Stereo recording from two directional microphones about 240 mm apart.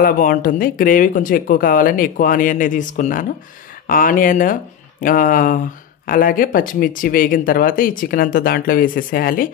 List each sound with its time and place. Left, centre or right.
0.0 s speech: left